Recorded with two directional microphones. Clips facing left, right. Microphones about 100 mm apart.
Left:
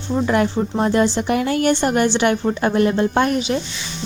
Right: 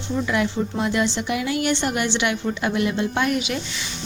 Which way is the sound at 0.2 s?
45° left (ahead or behind).